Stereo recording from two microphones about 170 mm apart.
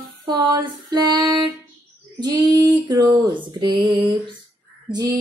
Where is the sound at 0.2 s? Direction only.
25° right (ahead or behind).